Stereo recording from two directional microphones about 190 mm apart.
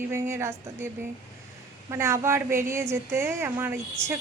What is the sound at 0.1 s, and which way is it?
Speech, 15° right (ahead or behind).